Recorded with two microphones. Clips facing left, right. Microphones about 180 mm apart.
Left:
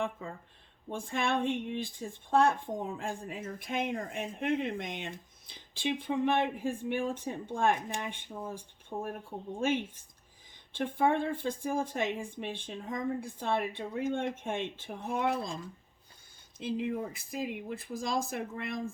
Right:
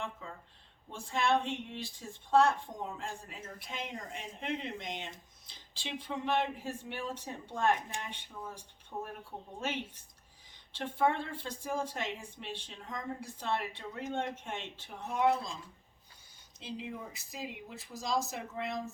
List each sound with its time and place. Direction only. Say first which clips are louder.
0.9 s speech: right 1 dB; 50° left (ahead or behind)